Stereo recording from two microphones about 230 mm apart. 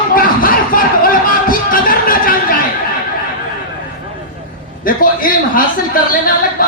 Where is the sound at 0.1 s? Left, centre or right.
Left.